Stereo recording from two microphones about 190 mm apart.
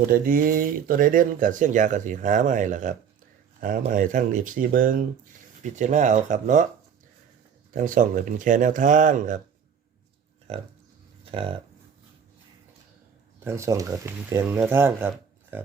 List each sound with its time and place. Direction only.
0.1 s speech: 45° right (ahead or behind)
7.7 s speech: 45° right (ahead or behind)
10.5 s speech: 30° right (ahead or behind)
13.4 s speech: 15° right (ahead or behind)